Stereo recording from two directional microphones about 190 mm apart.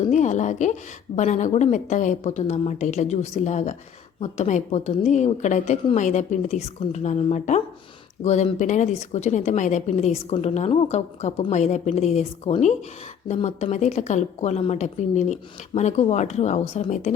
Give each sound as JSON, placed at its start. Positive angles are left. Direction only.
{"t": 0.1, "sound": "a woman's voice", "side_deg": 40}